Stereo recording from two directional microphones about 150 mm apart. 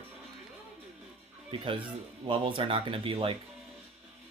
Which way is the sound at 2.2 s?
35° right (ahead or behind).